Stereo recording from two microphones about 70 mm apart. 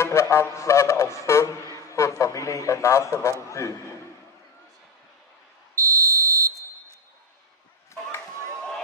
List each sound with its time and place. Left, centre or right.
0.0 s a man's voice: left
5.9 s fire alarm: right